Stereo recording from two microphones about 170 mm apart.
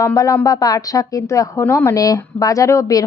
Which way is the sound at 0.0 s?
15° left (ahead or behind).